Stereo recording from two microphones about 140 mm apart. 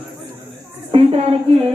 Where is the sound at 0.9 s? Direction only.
45° right (ahead or behind).